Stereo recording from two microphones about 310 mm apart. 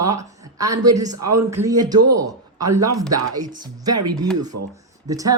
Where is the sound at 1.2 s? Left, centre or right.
Right.